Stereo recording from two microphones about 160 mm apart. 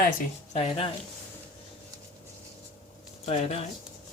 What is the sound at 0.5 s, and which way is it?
Speech, 35° left (ahead or behind).